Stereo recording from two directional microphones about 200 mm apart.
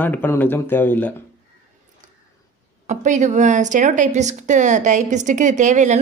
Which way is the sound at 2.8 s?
40° right (ahead or behind).